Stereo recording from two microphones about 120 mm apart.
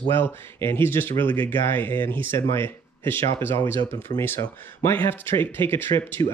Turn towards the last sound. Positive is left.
turn(degrees=40)  # may be behind; listen again after turning